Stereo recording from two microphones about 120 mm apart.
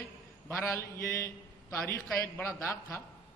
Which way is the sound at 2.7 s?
20° left (ahead or behind).